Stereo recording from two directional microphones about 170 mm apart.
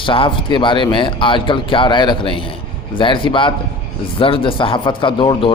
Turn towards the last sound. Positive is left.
turn(degrees=30)  # may be behind; listen again after turning